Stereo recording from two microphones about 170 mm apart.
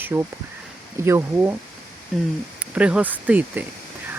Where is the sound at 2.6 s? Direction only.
5° right (ahead or behind).